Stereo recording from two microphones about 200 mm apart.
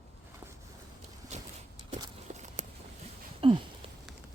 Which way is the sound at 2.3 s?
35° right (ahead or behind).